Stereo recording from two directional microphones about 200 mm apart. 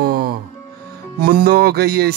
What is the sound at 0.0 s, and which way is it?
Music, 50° right (ahead or behind).